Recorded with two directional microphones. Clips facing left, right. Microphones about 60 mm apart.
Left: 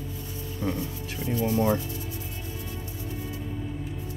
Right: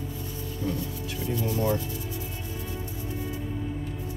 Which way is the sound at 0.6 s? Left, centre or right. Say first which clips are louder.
Left 1 dB; left.